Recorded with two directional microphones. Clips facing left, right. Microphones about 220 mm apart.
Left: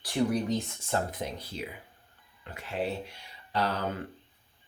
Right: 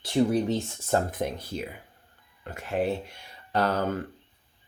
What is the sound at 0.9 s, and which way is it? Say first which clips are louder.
Speech: right 5 dB; 50° right (ahead or behind).